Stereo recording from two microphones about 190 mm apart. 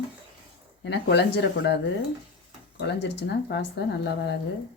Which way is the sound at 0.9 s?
60° left (ahead or behind).